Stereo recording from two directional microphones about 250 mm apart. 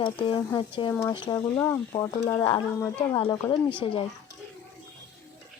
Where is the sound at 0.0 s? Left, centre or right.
Centre.